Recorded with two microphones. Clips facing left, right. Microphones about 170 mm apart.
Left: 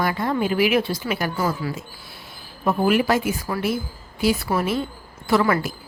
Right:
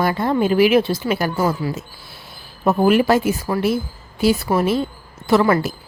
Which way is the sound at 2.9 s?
30° right (ahead or behind).